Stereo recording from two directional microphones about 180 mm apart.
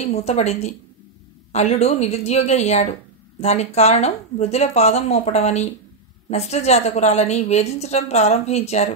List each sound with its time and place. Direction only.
0.0 s a woman's voice: 35° left (ahead or behind)